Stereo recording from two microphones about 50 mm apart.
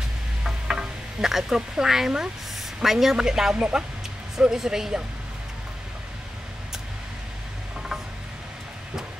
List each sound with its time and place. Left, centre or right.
0.4 s a sound: centre
2.8 s speech: centre
3.5 s speech: right
4.4 s speech: centre